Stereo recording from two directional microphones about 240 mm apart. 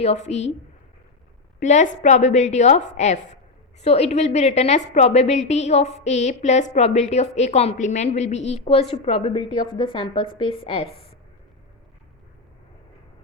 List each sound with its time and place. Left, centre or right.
0.0 s a woman's voice: left
1.5 s a woman's voice: left